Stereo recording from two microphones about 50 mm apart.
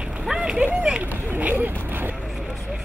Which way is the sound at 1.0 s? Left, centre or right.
Right.